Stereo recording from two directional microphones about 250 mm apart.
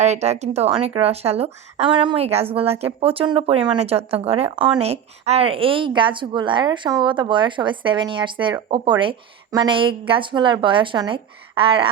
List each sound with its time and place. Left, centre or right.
0.0 s speech: right